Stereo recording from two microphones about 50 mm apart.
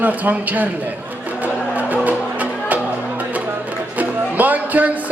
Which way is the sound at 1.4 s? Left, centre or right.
Right.